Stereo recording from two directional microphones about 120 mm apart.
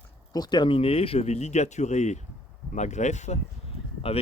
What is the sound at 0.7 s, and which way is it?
Speech, 55° left (ahead or behind).